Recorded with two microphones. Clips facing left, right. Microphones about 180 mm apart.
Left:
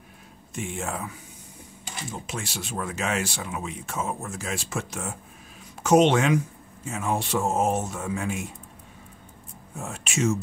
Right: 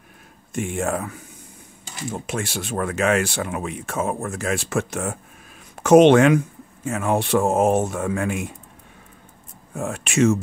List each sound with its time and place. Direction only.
0.5 s speech: 50° right (ahead or behind)
9.8 s speech: 60° right (ahead or behind)